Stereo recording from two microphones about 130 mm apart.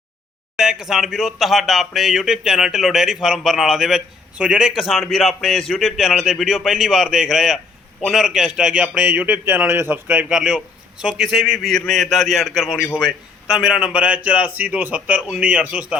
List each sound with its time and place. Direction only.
0.5 s a man's voice: 5° right (ahead or behind)